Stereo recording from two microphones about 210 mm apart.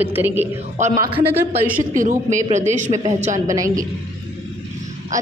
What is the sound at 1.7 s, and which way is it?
A woman's voice, 40° right (ahead or behind).